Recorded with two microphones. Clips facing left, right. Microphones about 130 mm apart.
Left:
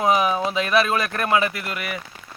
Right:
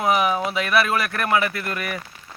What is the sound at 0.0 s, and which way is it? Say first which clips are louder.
Speech: left 1 dB; 25° left (ahead or behind).